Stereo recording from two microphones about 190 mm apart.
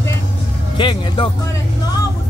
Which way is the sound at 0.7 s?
25° left (ahead or behind).